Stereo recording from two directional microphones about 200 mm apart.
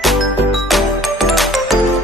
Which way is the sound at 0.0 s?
Centre (ahead or behind).